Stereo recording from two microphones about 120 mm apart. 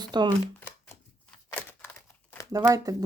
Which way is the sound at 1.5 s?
15° left (ahead or behind).